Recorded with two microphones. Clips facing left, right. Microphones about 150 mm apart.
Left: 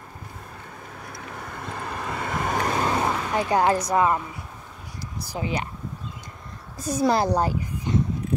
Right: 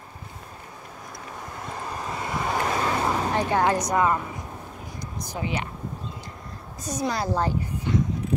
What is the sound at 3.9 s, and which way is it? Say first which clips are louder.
Speech: left 1 dB; 20° left (ahead or behind).